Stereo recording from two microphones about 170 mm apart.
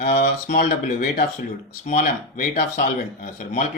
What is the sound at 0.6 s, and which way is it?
Speech, 60° left (ahead or behind).